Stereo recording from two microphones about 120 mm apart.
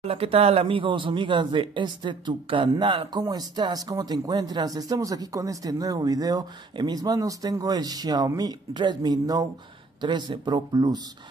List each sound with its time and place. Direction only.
0.0 s speech: 55° right (ahead or behind); by 11.0 s 35° right (ahead or behind)